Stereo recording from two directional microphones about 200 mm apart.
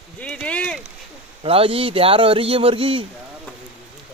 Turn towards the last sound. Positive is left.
turn(degrees=-25)  # may be behind; listen again after turning